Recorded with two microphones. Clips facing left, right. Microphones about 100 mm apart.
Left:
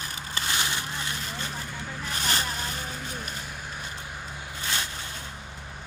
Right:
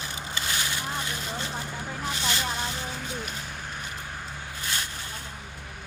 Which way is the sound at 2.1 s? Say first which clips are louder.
Left 3 dB; 45° left (ahead or behind).